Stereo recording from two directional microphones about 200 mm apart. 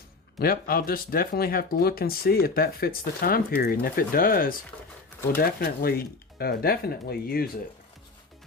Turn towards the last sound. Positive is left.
turn(degrees=50)  # may be behind; listen again after turning